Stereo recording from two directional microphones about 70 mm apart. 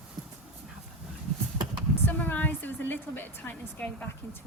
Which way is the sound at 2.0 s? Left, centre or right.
Left.